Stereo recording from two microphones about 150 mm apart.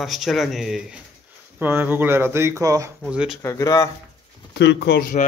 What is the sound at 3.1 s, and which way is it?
Speech, 5° right (ahead or behind).